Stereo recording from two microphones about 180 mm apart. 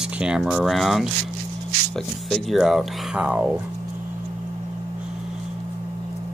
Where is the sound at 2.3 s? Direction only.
Centre (ahead or behind).